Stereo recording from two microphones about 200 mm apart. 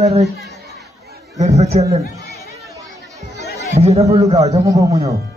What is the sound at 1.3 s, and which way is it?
Speech, 35° right (ahead or behind).